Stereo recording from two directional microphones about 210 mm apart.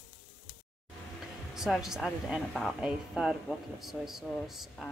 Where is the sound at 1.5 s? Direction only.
Centre (ahead or behind).